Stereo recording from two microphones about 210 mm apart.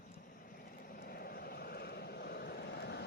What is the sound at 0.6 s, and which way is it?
Vehicle, 45° left (ahead or behind).